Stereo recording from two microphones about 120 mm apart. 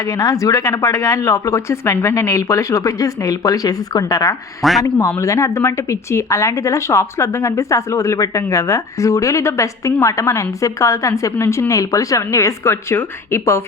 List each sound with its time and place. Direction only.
0.0 s speech: 30° left (ahead or behind)